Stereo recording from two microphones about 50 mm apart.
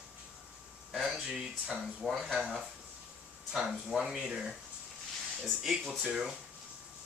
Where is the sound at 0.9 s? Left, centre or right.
Centre.